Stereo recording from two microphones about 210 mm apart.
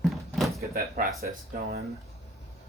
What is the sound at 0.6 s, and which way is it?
Speech, 45° right (ahead or behind).